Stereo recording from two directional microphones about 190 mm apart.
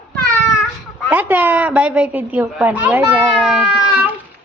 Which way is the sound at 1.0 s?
10° right (ahead or behind).